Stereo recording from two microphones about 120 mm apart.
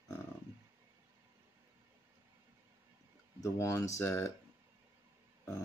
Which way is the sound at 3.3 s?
25° left (ahead or behind).